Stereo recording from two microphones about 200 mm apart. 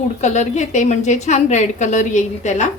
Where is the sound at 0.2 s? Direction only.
35° left (ahead or behind).